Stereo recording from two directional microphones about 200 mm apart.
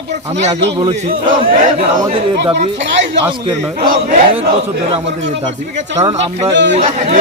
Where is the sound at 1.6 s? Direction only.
30° right (ahead or behind).